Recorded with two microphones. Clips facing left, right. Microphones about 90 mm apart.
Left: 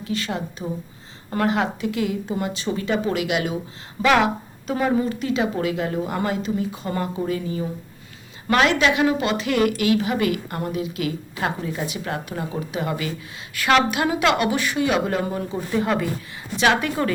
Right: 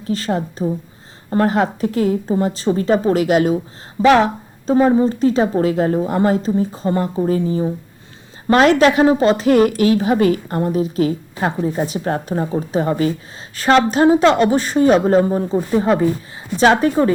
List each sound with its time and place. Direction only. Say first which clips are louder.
0.0 s speech: right 6 dB; 40° right (ahead or behind)